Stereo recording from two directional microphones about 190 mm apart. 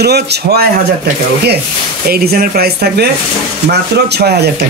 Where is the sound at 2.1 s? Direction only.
50° right (ahead or behind).